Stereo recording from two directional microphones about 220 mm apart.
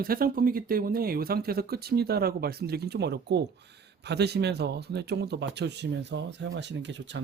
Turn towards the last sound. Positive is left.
turn(degrees=-55)  # may be behind; listen again after turning